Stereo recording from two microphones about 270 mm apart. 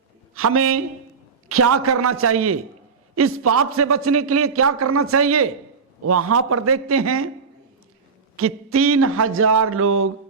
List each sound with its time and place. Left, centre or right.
0.3 s a man's voice: right
8.4 s a man's voice: right